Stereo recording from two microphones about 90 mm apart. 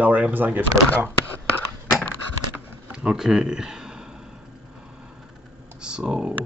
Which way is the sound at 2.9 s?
10° right (ahead or behind).